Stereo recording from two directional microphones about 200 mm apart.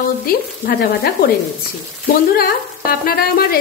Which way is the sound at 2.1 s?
50° left (ahead or behind).